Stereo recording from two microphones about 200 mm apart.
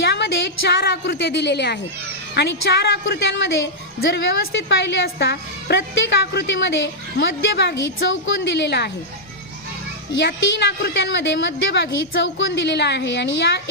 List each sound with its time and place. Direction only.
0.0 s music: 60° left (ahead or behind)
0.7 s a woman's voice: 55° left (ahead or behind)
10.1 s a woman's voice: 65° left (ahead or behind)